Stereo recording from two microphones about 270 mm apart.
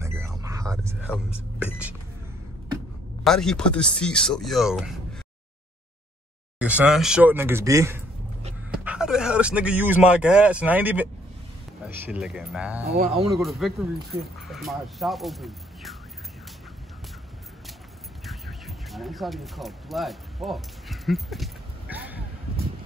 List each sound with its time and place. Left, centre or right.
0.0 s a sound: centre
1.1 s speech: centre
3.3 s speech: centre
6.6 s speech: centre
12.8 s speech: right
13.4 s speech: centre
18.2 s a sound: centre